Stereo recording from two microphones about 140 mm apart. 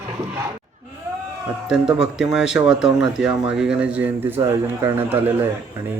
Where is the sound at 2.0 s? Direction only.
5° right (ahead or behind).